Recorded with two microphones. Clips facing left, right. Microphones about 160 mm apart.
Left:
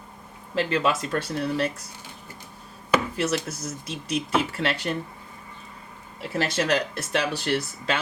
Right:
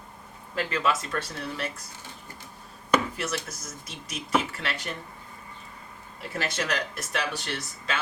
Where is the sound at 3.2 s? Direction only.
30° left (ahead or behind).